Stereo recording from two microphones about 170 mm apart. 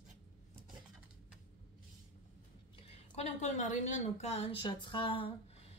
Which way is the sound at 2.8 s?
40° left (ahead or behind).